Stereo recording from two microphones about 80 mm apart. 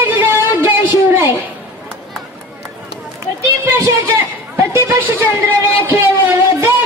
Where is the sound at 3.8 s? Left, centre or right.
Right.